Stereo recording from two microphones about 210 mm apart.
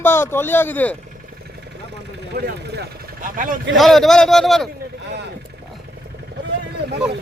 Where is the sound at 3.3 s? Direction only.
40° right (ahead or behind).